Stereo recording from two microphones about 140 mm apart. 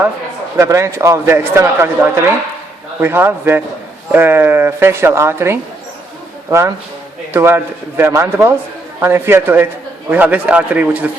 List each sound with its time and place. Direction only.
0.6 s a man's voice: 20° right (ahead or behind)
7.3 s speech: 15° right (ahead or behind)